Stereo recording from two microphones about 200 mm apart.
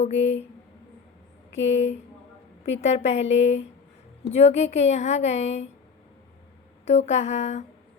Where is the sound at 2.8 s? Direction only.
35° left (ahead or behind).